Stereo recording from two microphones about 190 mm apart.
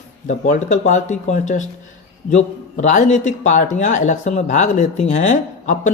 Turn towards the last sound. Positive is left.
turn(degrees=40)  # may be behind; listen again after turning